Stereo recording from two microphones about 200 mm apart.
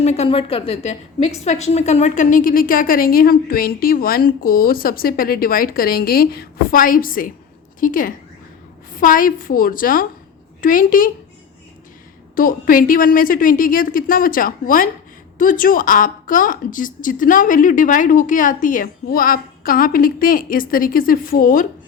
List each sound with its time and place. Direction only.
0.0 s a woman's voice: 30° left (ahead or behind)
12.4 s a woman's voice: 45° left (ahead or behind)